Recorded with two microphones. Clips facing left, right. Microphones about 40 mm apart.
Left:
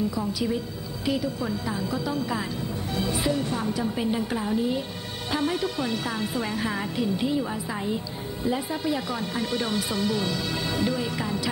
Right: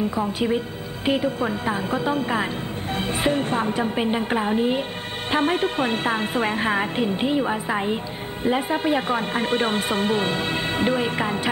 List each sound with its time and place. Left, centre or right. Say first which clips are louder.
0.1 s speech: right 5 dB; right